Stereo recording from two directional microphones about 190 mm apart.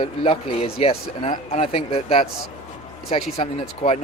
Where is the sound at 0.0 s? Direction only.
30° left (ahead or behind).